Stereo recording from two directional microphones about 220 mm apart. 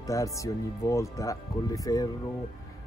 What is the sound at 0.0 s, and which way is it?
Speech, 15° left (ahead or behind).